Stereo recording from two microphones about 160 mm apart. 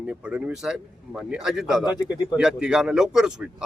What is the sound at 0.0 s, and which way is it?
A man's voice, 5° right (ahead or behind).